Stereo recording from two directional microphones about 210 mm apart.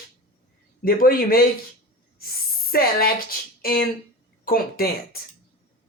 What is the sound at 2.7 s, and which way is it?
Speech, 45° left (ahead or behind).